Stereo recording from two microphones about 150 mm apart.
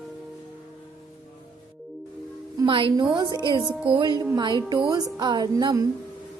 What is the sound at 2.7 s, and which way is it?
A woman's voice, 35° right (ahead or behind).